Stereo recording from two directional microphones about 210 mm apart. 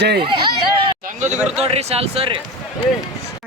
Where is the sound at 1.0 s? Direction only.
35° right (ahead or behind).